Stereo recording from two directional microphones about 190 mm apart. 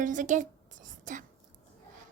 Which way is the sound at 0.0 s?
40° right (ahead or behind).